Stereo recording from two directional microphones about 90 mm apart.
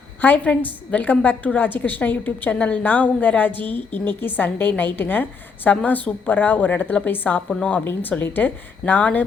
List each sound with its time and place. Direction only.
0.2 s a woman's voice: 20° left (ahead or behind)
7.5 s a woman's voice: 10° left (ahead or behind)
7.9 s a woman's voice: 20° left (ahead or behind)